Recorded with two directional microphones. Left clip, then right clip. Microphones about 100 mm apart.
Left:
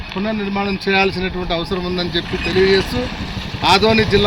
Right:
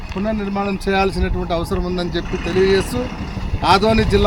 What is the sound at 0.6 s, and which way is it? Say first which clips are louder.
Speech: left 2 dB; 35° right (ahead or behind).